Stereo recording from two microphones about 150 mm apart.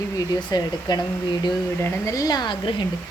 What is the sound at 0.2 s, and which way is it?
Speech, 25° left (ahead or behind).